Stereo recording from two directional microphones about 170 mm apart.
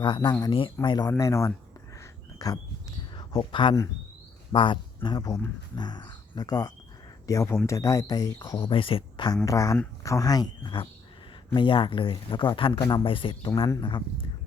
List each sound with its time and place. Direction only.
0.0 s speech: 30° left (ahead or behind)